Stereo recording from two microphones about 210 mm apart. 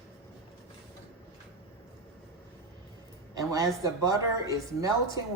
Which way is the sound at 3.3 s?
15° right (ahead or behind).